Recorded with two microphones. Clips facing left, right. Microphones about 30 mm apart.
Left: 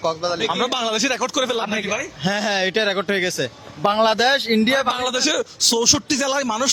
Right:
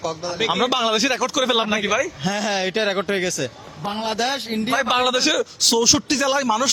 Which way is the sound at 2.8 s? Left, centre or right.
Centre.